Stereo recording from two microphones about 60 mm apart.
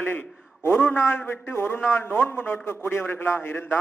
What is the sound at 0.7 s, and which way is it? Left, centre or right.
A man's voice, left.